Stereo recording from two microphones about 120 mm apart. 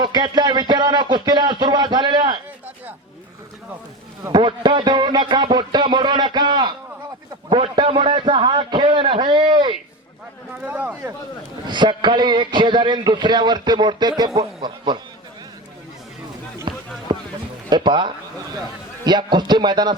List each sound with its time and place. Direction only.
0.0 s a man's voice: 35° right (ahead or behind)
4.3 s a man's voice: 40° right (ahead or behind)
7.8 s a man's voice: 45° right (ahead or behind)
10.6 s speech: 15° right (ahead or behind)
11.7 s a man's voice: 40° right (ahead or behind)
16.7 s a sound: 40° right (ahead or behind)
17.7 s a man's voice: 40° right (ahead or behind)